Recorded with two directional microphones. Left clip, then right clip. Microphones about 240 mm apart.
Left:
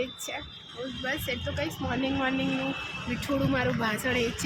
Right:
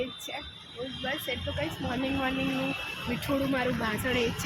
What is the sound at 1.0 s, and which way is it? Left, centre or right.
Speech, centre.